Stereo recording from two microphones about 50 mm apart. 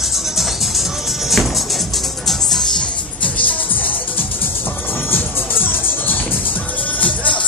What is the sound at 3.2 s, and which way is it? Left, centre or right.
Music, left.